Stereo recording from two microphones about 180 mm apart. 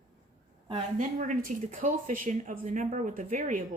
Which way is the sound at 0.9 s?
45° right (ahead or behind).